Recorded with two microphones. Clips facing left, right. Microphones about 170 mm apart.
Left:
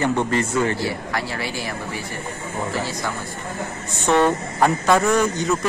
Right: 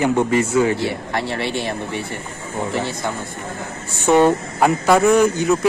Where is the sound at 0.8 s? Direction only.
25° right (ahead or behind).